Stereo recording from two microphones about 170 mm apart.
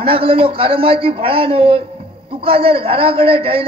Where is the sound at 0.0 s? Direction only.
30° right (ahead or behind).